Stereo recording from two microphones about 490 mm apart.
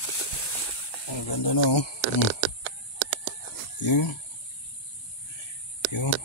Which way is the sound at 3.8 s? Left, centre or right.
Left.